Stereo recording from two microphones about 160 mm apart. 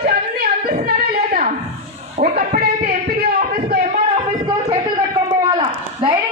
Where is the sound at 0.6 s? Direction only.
65° right (ahead or behind).